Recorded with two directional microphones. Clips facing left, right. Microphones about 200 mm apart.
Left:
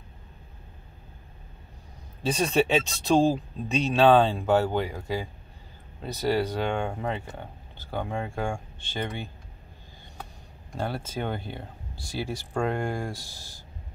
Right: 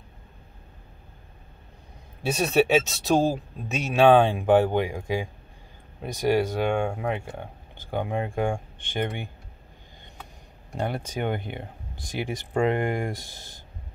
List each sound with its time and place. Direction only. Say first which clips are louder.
2.2 s speech: right 2 dB; 10° right (ahead or behind)
10.7 s speech: right 2 dB; 15° right (ahead or behind)